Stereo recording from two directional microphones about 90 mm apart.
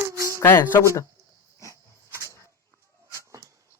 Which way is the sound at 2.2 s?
30° left (ahead or behind).